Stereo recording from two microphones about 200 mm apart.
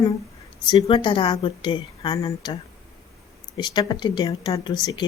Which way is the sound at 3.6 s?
20° left (ahead or behind).